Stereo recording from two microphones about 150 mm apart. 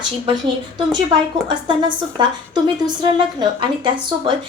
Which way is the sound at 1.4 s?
30° right (ahead or behind).